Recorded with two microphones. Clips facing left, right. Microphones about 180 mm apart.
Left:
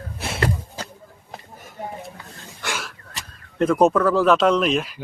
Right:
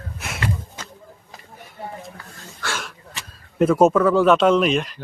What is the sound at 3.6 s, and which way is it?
Speech, 5° right (ahead or behind).